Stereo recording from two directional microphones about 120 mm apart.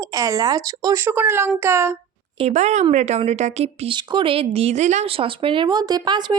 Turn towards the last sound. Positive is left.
turn(degrees=-40)  # may be behind; listen again after turning